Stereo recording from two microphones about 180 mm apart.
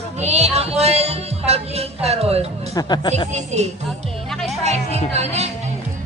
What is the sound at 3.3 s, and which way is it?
Music, 40° right (ahead or behind).